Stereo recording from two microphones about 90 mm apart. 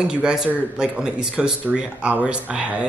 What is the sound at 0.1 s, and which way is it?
Speech, 10° right (ahead or behind).